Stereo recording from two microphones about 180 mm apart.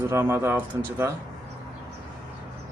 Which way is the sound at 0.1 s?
15° right (ahead or behind).